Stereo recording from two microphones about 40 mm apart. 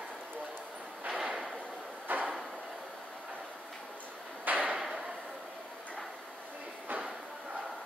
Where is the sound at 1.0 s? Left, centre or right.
Right.